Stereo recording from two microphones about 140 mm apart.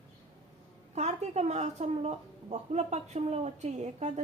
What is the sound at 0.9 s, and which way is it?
A woman's voice, 55° right (ahead or behind).